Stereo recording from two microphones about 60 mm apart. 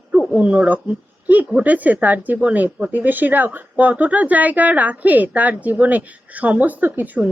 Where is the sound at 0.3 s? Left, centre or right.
Right.